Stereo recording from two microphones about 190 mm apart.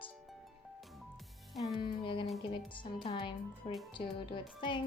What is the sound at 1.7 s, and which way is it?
Music, 25° left (ahead or behind).